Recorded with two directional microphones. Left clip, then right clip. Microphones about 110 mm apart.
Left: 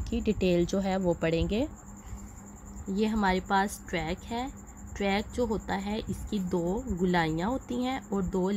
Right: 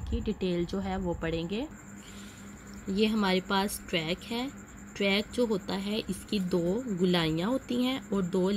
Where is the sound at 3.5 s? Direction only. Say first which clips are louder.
Left 2 dB; 30° left (ahead or behind).